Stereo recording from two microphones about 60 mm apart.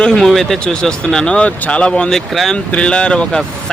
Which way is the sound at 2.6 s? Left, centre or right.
Centre.